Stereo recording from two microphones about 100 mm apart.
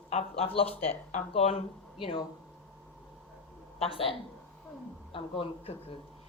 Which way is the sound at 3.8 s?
70° left (ahead or behind).